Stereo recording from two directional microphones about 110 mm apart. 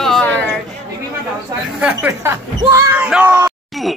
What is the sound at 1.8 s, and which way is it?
Speech, 15° right (ahead or behind).